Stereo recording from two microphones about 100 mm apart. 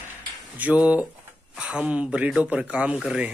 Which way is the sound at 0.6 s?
15° right (ahead or behind).